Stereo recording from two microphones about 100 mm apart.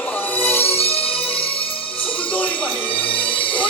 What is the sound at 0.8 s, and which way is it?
Music, 85° left.